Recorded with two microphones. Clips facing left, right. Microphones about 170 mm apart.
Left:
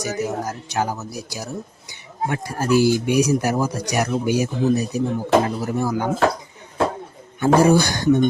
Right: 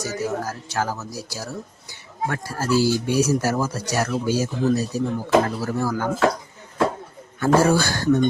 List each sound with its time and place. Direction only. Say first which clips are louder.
0.0 s speech: left 1 dB; 15° left (ahead or behind)
7.3 s speech: left 3 dB; 15° left (ahead or behind)